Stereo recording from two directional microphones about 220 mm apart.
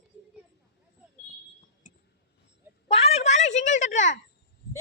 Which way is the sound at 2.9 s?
30° left (ahead or behind).